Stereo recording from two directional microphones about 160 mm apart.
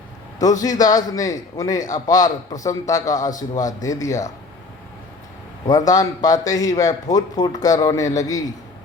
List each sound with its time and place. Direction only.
0.3 s a man's voice: 20° left (ahead or behind)
5.6 s a man's voice: 25° left (ahead or behind)